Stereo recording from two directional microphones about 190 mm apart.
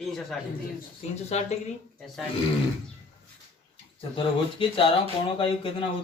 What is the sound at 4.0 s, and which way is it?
A man's voice, 25° left (ahead or behind).